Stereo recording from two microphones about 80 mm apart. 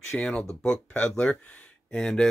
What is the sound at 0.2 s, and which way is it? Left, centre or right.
Speech, centre.